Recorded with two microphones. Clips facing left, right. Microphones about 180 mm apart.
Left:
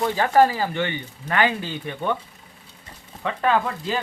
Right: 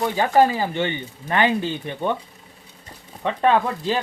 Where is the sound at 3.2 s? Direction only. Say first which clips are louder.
Right 3 dB; 25° right (ahead or behind).